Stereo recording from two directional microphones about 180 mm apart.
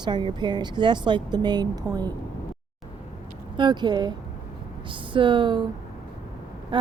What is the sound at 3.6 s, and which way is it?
Speech, 25° right (ahead or behind).